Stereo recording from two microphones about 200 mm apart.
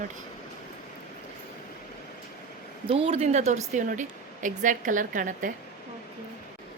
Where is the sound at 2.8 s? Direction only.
30° right (ahead or behind).